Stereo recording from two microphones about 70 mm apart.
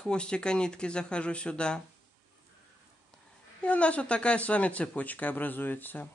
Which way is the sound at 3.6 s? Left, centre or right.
Centre.